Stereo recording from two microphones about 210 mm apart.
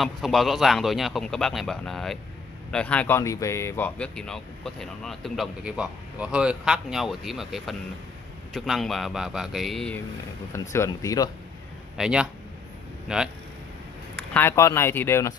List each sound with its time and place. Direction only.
0.0 s speech: centre (ahead or behind); by 11.2 s 15° left (ahead or behind)
12.0 s speech: 5° right (ahead or behind)
14.1 s speech: 10° left (ahead or behind)